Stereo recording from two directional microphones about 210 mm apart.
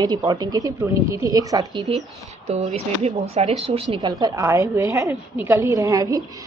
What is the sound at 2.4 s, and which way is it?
Speech, 30° right (ahead or behind).